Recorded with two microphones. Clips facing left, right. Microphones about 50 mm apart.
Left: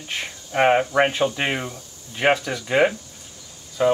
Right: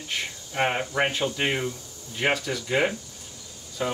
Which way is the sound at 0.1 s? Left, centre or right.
Left.